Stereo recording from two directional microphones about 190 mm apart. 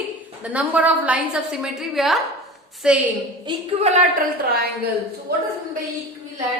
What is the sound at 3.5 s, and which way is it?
Speech, 35° right (ahead or behind).